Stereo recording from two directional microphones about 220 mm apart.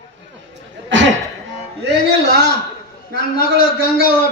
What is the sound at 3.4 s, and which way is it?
Speech, 40° left (ahead or behind).